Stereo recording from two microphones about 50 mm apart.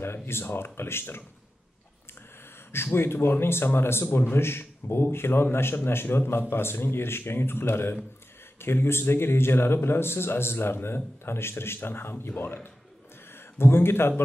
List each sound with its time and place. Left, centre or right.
0.0 s a man's voice: left
2.7 s a man's voice: left